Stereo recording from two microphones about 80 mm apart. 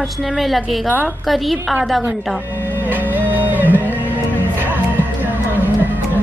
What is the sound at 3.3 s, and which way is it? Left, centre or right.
Music, right.